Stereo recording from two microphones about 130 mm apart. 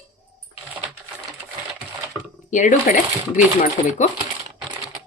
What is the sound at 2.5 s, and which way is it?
Speech, 75° left (ahead or behind).